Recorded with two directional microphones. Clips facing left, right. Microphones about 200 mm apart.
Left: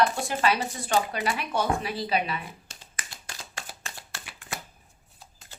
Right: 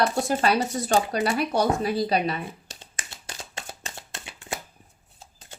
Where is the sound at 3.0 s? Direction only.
25° right (ahead or behind).